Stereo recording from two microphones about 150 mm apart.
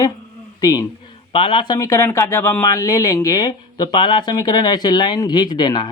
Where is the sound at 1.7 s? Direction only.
20° left (ahead or behind).